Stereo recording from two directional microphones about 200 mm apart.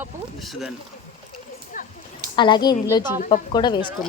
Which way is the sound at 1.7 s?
40° left (ahead or behind).